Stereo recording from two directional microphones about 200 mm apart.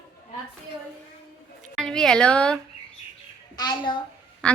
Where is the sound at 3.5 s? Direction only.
20° left (ahead or behind).